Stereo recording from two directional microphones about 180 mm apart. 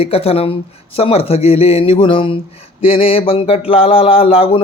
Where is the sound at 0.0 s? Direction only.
35° left (ahead or behind).